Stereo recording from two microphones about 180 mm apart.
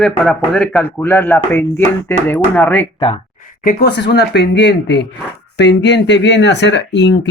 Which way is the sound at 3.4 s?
50° left (ahead or behind).